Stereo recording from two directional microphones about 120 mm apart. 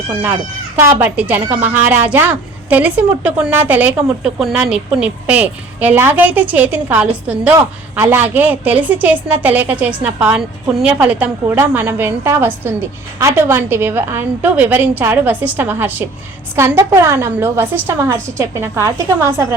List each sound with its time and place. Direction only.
0.8 s a woman's voice: 20° right (ahead or behind)